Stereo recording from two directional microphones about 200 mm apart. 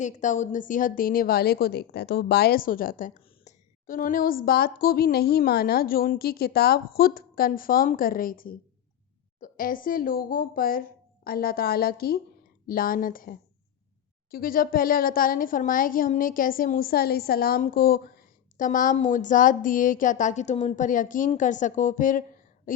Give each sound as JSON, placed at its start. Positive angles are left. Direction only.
{"t": 0.0, "sound": "a woman's voice", "side_deg": 40}